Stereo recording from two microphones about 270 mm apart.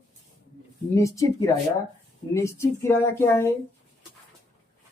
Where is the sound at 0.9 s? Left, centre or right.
Centre.